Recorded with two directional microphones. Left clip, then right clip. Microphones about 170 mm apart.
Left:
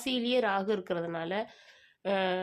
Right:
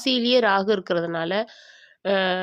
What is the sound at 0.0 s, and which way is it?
A woman's voice, 35° right (ahead or behind).